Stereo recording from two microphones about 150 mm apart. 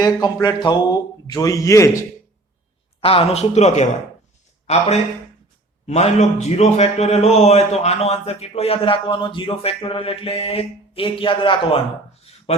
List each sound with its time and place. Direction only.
0.0 s speech: 25° left (ahead or behind)
3.0 s a man's voice: 40° left (ahead or behind)
12.3 s a sound: 45° left (ahead or behind)